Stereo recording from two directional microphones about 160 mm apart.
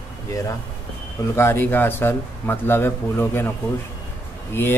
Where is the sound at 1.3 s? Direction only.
15° left (ahead or behind).